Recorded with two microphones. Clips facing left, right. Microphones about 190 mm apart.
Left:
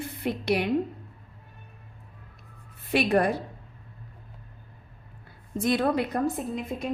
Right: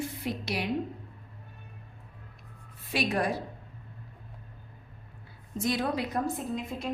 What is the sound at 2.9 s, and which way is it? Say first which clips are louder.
Speech: left 6 dB; 60° left (ahead or behind).